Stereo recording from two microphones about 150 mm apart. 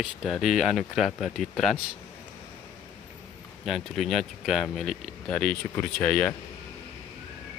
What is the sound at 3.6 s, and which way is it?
Speech, centre (ahead or behind).